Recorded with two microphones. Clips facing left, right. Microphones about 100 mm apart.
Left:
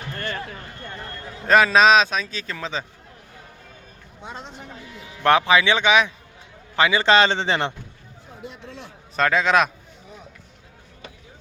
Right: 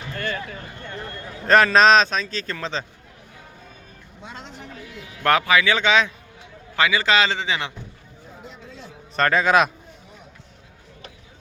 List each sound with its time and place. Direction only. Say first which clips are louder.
0.2 s speech: right 2 dB; 35° left (ahead or behind)
1.5 s a man's voice: even; 5° left (ahead or behind)
4.2 s a man's voice: left 2 dB; 25° left (ahead or behind)
9.1 s a man's voice: right 1 dB; centre (ahead or behind)